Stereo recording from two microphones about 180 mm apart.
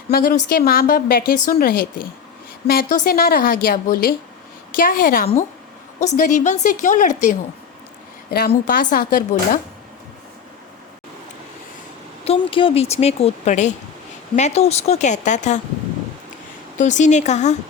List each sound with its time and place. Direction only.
0.1 s a woman's voice: 55° left (ahead or behind)
8.3 s a woman's voice: 60° left (ahead or behind)
12.2 s speech: 30° left (ahead or behind)
16.7 s speech: 40° left (ahead or behind)